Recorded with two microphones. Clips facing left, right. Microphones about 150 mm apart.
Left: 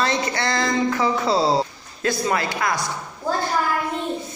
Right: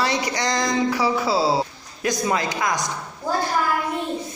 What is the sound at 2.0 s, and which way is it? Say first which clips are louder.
Speech: even; 15° right (ahead or behind).